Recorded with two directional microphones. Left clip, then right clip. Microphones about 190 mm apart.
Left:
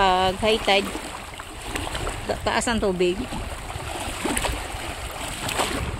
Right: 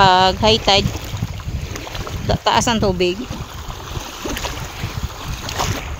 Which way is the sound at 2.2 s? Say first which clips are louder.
Right 8 dB; 30° right (ahead or behind).